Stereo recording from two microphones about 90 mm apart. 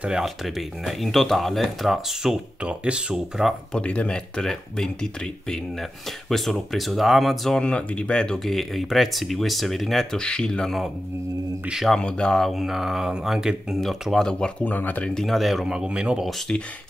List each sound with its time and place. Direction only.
0.0 s speech: 5° right (ahead or behind)
3.7 s speech: 15° left (ahead or behind)
14.6 s speech: 20° left (ahead or behind)
15.1 s speech: centre (ahead or behind)
16.3 s speech: 5° left (ahead or behind)